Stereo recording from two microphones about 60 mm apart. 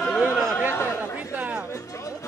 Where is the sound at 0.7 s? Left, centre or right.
Left.